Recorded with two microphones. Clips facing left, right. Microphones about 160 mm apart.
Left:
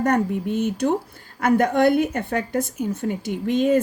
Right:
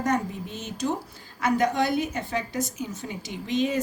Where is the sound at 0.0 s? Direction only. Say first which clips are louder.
Left 6 dB; 55° left (ahead or behind).